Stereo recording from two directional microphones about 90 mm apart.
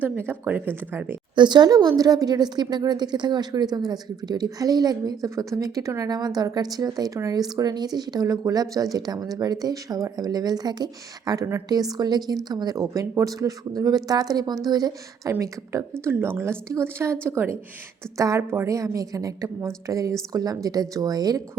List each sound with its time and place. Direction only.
0.0 s a woman's voice: 20° right (ahead or behind)
1.4 s speech: 55° right (ahead or behind)
15.3 s a woman's voice: 35° right (ahead or behind)